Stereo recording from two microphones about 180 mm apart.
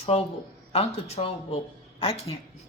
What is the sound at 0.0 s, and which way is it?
Speech, 35° left (ahead or behind).